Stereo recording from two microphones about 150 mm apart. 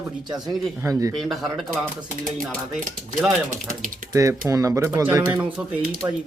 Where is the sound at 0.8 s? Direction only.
20° right (ahead or behind).